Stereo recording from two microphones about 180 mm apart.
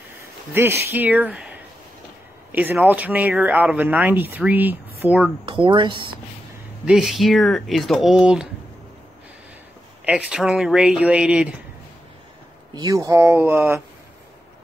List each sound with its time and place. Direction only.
0.5 s speech: 10° right (ahead or behind)
5.4 s speech: 30° right (ahead or behind)
6.9 s speech: centre (ahead or behind)
10.0 s speech: 5° right (ahead or behind)
12.7 s speech: 20° right (ahead or behind)